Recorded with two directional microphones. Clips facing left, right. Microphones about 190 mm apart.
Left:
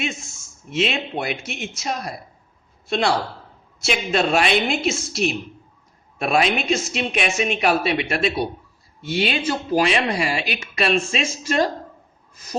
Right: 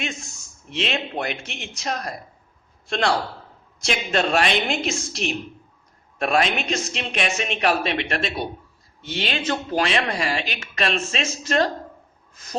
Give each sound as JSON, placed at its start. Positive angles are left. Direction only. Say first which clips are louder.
{"t": 0.8, "sound": "a woman's voice", "louder": "left 3 dB", "side_deg": 5}